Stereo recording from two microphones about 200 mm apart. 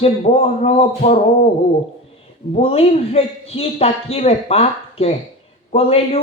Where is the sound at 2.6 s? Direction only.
30° left (ahead or behind).